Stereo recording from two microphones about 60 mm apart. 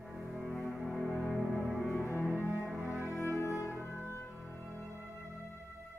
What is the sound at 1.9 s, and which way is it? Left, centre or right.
Cello, left.